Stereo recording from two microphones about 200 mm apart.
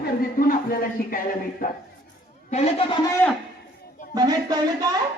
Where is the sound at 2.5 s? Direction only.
30° left (ahead or behind).